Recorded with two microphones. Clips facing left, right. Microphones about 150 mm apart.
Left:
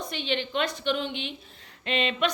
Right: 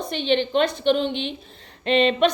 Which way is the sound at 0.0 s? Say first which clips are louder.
Right 8 dB; 25° right (ahead or behind).